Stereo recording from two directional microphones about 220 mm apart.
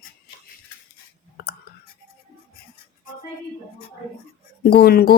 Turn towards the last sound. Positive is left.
turn(degrees=45)  # may be behind; listen again after turning